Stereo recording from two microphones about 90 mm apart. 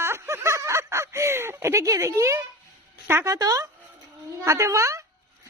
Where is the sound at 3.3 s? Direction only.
40° right (ahead or behind).